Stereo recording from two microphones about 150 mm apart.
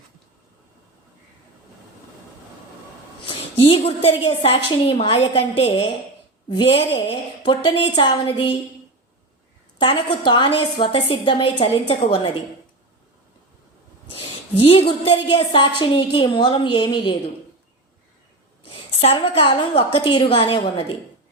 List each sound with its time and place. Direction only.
3.2 s a woman's voice: 40° left (ahead or behind)
9.8 s a woman's voice: 35° left (ahead or behind)
14.6 s a woman's voice: 40° left (ahead or behind)
18.9 s a woman's voice: 40° left (ahead or behind)